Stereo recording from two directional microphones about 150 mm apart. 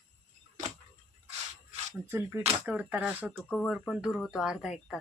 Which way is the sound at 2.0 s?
15° right (ahead or behind).